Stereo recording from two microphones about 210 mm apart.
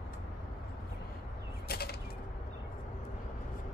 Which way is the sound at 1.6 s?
50° left (ahead or behind).